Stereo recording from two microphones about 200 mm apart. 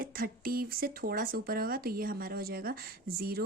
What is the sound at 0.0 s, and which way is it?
A woman's voice, 45° right (ahead or behind).